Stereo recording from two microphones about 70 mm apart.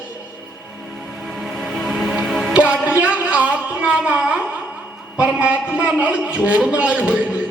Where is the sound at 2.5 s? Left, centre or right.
Centre.